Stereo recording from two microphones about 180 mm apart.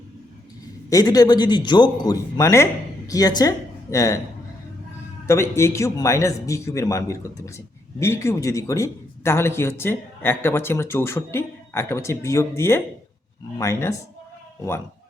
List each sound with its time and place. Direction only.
0.9 s a man's voice: 20° left (ahead or behind)
5.2 s a man's voice: 15° left (ahead or behind)